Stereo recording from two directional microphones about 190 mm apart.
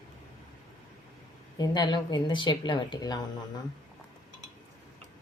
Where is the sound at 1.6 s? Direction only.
20° left (ahead or behind).